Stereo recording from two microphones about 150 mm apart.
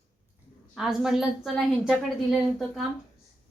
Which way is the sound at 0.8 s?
5° right (ahead or behind).